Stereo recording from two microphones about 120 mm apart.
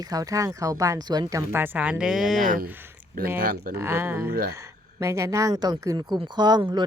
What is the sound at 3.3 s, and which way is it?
Speech, 20° right (ahead or behind).